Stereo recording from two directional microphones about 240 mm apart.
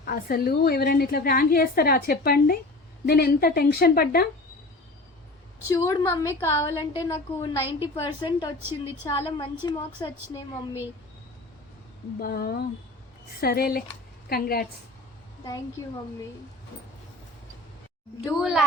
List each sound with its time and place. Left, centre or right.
0.0 s a woman's voice: left
5.6 s a woman's voice: centre
12.2 s a woman's voice: left
18.3 s a woman's voice: centre